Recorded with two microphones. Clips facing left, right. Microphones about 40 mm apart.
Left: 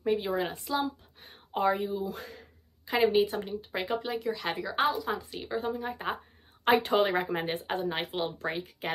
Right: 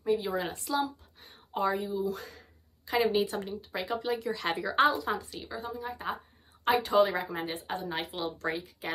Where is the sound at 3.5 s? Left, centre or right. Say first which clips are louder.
Left 2 dB; left.